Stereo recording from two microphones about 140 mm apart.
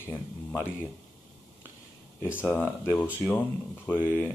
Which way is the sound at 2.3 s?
15° left (ahead or behind).